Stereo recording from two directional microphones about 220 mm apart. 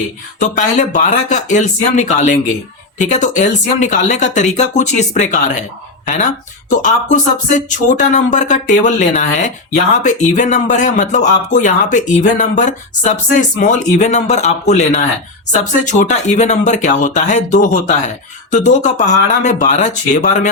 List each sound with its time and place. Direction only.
0.3 s speech: 30° left (ahead or behind)
6.7 s speech: 35° left (ahead or behind)